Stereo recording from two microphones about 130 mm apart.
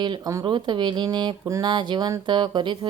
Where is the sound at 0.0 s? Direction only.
35° right (ahead or behind).